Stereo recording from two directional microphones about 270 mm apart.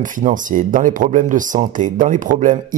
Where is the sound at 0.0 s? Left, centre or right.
Right.